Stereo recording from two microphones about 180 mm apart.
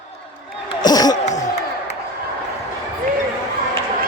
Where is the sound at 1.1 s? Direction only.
40° left (ahead or behind).